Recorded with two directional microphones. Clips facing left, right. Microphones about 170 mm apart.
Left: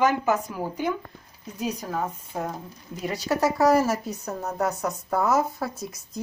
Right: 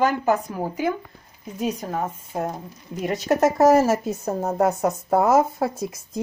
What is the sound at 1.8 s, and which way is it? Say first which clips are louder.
A woman's voice: right 2 dB; 25° right (ahead or behind).